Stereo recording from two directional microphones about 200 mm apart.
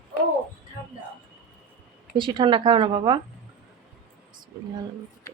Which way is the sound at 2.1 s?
25° right (ahead or behind).